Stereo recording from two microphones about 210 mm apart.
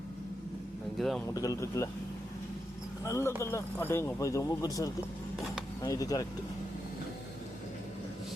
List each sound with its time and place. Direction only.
0.9 s speech: centre (ahead or behind)
1.3 s speech: 15° left (ahead or behind)
3.0 s speech: 15° left (ahead or behind)